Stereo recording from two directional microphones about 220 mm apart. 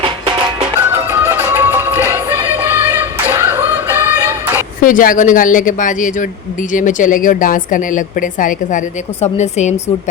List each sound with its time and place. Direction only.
0.9 s music: 10° right (ahead or behind)
4.8 s speech: 40° left (ahead or behind)